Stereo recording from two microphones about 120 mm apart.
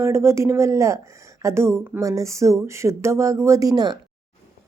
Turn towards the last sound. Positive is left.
turn(degrees=-35)  # may be behind; listen again after turning